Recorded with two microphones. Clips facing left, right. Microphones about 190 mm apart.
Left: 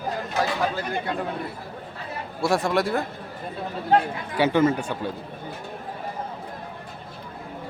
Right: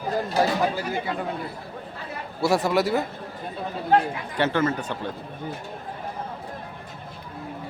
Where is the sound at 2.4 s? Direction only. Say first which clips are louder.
Right 1 dB; centre (ahead or behind).